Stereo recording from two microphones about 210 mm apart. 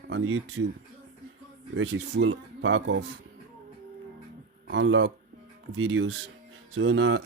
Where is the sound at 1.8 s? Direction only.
60° right (ahead or behind).